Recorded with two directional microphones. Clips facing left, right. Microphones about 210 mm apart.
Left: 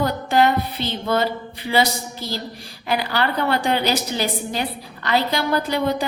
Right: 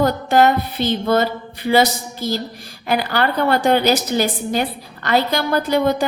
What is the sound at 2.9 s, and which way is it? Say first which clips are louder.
A woman's voice: right 3 dB; 50° right (ahead or behind).